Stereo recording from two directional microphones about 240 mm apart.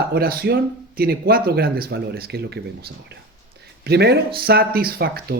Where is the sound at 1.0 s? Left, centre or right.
Right.